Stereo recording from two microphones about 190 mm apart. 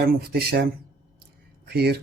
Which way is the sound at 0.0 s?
55° right (ahead or behind).